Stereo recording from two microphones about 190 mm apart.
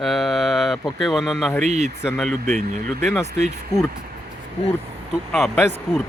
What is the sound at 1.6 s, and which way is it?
Speech, 35° right (ahead or behind).